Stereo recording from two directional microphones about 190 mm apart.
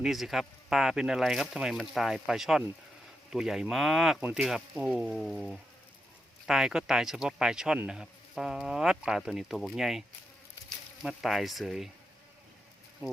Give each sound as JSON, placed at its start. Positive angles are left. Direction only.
{"t": 0.0, "sound": "speech", "side_deg": 0}
{"t": 11.0, "sound": "speech", "side_deg": 0}